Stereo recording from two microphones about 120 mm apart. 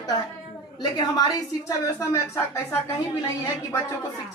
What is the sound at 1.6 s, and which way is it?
A woman's voice, 25° left (ahead or behind).